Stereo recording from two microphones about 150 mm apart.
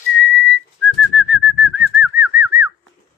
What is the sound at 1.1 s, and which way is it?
Whistling, 5° right (ahead or behind).